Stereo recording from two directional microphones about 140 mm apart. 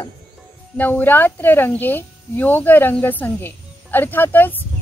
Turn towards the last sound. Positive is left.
turn(degrees=15)  # may be behind; listen again after turning